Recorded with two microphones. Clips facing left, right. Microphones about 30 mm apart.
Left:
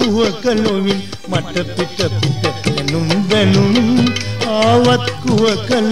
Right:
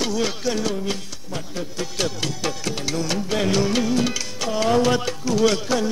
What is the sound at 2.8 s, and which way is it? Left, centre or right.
Music, left.